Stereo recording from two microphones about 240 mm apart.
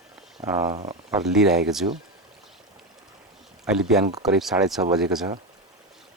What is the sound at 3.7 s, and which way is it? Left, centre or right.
Speech, centre.